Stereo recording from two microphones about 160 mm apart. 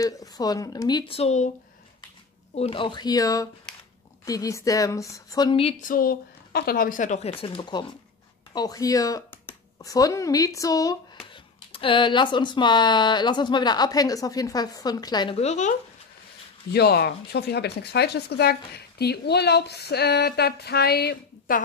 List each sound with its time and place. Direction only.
0.0 s speech: 20° left (ahead or behind); by 1.5 s 45° left (ahead or behind)
2.5 s speech: 35° left (ahead or behind)
5.8 s a woman's voice: 60° left (ahead or behind)
7.2 s speech: 35° left (ahead or behind)
11.7 s speech: 30° left (ahead or behind)
15.3 s speech: 45° left (ahead or behind)
16.7 s speech: 85° left